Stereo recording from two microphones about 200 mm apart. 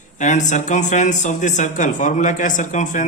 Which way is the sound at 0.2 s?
40° left (ahead or behind).